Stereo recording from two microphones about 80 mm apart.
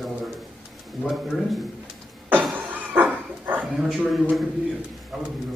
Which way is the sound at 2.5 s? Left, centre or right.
Right.